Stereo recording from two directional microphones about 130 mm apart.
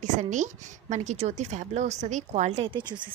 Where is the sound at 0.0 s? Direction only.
65° right (ahead or behind).